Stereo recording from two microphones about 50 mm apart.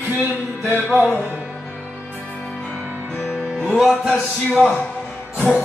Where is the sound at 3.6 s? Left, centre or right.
Centre.